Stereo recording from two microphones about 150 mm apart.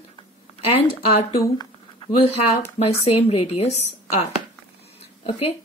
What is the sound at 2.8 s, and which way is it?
Speech, 45° left (ahead or behind).